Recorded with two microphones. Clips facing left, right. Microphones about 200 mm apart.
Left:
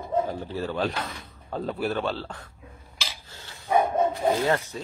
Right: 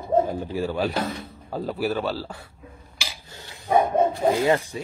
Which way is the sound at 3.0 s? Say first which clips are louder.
Right 1 dB; 15° right (ahead or behind).